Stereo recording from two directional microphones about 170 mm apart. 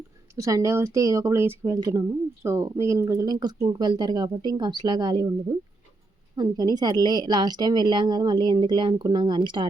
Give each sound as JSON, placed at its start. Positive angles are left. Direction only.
{"t": 0.3, "sound": "speech", "side_deg": -20}
{"t": 6.3, "sound": "speech", "side_deg": -25}